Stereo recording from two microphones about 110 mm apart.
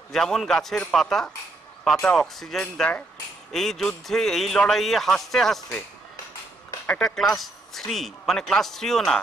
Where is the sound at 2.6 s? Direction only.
15° left (ahead or behind).